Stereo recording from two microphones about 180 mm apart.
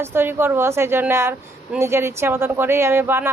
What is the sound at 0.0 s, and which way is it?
A woman's voice, 15° right (ahead or behind).